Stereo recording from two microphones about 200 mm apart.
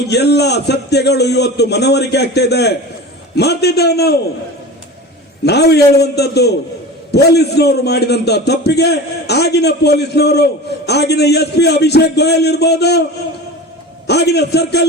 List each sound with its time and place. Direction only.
0.1 s a man's voice: 55° left (ahead or behind)
5.5 s a man's voice: 55° left (ahead or behind)
14.1 s a man's voice: 55° left (ahead or behind)